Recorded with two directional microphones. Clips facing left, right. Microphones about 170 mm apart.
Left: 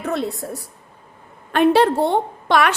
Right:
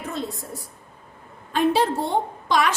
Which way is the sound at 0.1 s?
70° left (ahead or behind).